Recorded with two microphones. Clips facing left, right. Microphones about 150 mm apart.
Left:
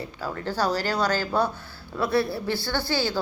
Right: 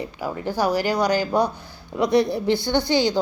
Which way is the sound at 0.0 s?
15° right (ahead or behind).